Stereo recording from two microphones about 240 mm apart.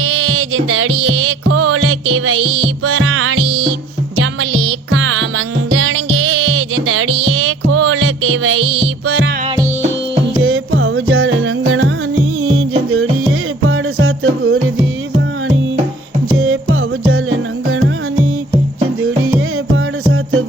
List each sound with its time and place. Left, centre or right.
0.0 s music: right
6.3 s music: right
10.4 s music: right
16.4 s music: right
19.7 s music: right